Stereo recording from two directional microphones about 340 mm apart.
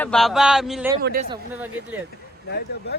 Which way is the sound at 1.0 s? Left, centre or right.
Right.